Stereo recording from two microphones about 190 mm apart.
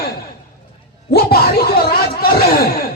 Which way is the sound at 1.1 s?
55° left (ahead or behind).